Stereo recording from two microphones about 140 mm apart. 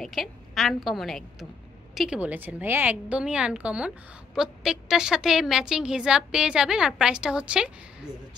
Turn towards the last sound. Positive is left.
turn(degrees=-5)  # may be behind; listen again after turning